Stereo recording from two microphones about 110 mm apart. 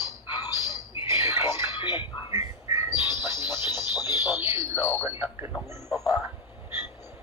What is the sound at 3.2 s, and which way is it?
Music, 25° right (ahead or behind).